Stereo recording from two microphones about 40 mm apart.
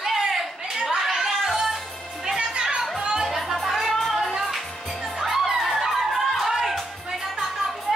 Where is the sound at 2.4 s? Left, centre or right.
Right.